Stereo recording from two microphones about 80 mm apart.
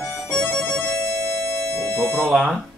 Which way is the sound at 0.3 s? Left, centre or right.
Centre.